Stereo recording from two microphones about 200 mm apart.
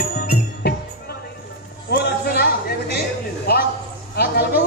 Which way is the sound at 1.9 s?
55° left (ahead or behind).